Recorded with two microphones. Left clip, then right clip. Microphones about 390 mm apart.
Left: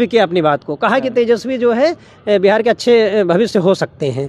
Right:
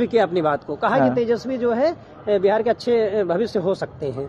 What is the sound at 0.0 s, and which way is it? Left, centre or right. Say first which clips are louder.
Speech: left 6 dB; left.